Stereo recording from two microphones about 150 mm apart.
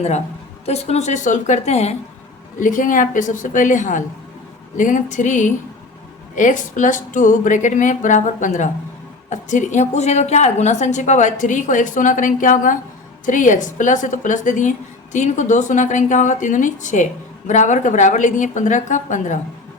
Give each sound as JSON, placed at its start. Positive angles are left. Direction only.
{"t": 0.6, "sound": "a woman's voice", "side_deg": 45}
{"t": 2.6, "sound": "a woman's voice", "side_deg": 60}